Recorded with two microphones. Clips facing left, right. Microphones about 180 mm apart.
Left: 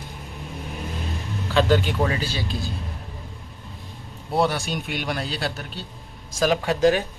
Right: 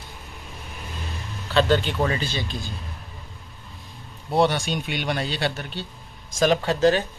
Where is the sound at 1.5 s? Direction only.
10° left (ahead or behind).